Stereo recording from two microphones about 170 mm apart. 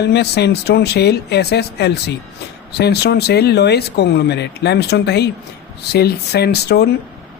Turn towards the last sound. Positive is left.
turn(degrees=75)  # may be behind; listen again after turning